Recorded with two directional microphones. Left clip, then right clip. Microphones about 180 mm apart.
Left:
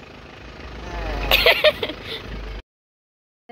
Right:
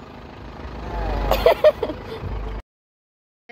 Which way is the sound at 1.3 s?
15° right (ahead or behind).